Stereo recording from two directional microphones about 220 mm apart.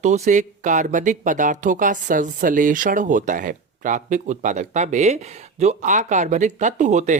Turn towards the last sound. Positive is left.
turn(degrees=-35)  # may be behind; listen again after turning